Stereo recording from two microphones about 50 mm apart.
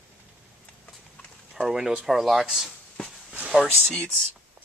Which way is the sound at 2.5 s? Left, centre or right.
Centre.